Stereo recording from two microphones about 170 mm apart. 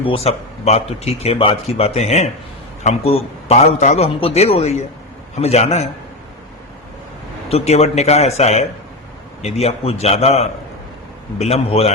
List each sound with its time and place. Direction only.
0.0 s speech: 35° left (ahead or behind)
7.5 s speech: 40° left (ahead or behind)